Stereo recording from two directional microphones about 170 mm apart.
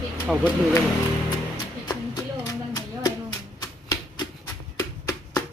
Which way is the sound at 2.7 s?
20° left (ahead or behind).